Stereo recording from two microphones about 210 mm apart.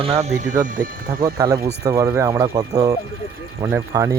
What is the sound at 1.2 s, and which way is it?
Speech, 15° right (ahead or behind).